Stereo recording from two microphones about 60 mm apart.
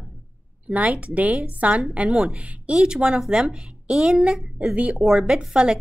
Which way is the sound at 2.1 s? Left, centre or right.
Centre.